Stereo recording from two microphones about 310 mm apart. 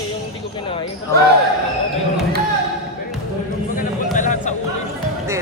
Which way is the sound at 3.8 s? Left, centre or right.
Left.